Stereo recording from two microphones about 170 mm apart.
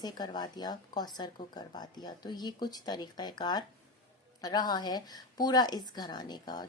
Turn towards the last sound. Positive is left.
turn(degrees=25)  # may be behind; listen again after turning